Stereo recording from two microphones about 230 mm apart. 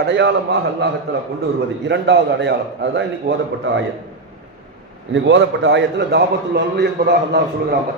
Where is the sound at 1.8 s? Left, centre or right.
Right.